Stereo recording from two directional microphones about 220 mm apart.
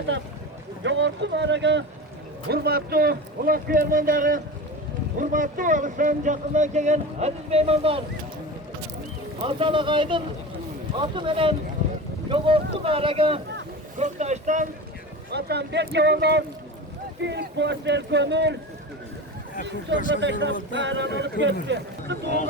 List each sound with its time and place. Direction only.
0.9 s speech: 55° right (ahead or behind); by 8.0 s 25° right (ahead or behind)
9.4 s speech: 25° right (ahead or behind)
15.3 s speech: 50° right (ahead or behind)
20.1 s speech: 55° right (ahead or behind)